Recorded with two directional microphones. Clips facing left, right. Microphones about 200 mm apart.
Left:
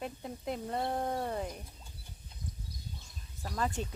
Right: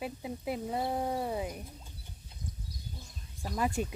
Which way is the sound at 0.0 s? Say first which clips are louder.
Right 2 dB; 5° right (ahead or behind).